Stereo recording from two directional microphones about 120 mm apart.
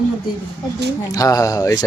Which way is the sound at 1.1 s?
30° left (ahead or behind).